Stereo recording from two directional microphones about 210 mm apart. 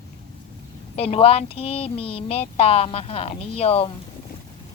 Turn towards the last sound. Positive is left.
turn(degrees=30)  # may be behind; listen again after turning